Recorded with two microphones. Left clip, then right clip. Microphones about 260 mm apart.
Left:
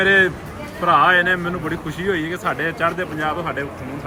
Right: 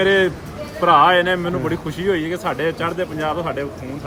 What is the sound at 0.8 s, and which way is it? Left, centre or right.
Speech, centre.